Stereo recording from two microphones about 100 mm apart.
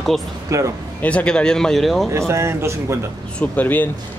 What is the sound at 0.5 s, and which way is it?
Speech, 30° right (ahead or behind).